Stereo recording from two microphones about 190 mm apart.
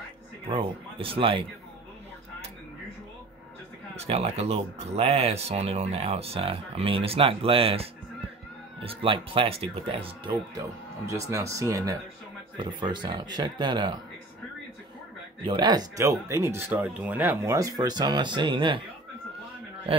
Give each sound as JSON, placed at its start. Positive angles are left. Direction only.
{"t": 0.5, "sound": "speech", "side_deg": -30}
{"t": 3.9, "sound": "speech", "side_deg": -35}
{"t": 11.1, "sound": "speech", "side_deg": -15}
{"t": 15.4, "sound": "speech", "side_deg": -25}
{"t": 19.9, "sound": "a man's voice", "side_deg": -30}